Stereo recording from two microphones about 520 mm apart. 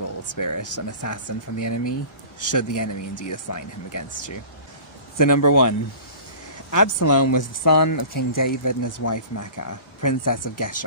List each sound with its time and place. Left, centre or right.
0.0 s speech: left